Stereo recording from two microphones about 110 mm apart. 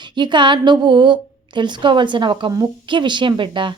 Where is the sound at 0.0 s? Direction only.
45° right (ahead or behind).